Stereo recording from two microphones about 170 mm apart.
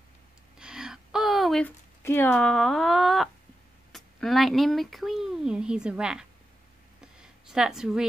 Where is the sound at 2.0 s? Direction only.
10° left (ahead or behind).